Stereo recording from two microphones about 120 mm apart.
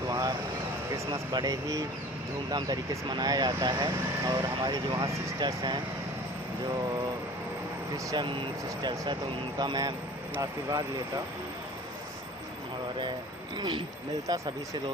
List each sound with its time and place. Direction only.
0.1 s vehicle: 30° right (ahead or behind)
0.9 s speech: 30° right (ahead or behind)
8.1 s speech: 40° right (ahead or behind)
13.6 s speech: 40° right (ahead or behind)
14.3 s speech: 30° right (ahead or behind)